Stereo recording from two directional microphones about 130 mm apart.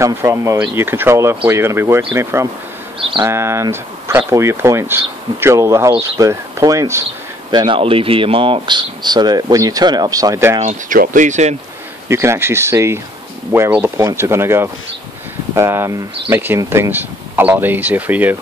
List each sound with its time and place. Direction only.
0.0 s speech: 20° right (ahead or behind)
3.0 s a sound: 40° right (ahead or behind)
3.3 s speech: 20° right (ahead or behind)
7.5 s speech: 40° right (ahead or behind)
10.6 s speech: 75° right (ahead or behind)
12.1 s speech: 20° right (ahead or behind)